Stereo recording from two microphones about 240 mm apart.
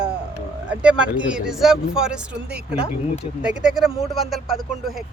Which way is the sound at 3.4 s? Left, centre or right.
Centre.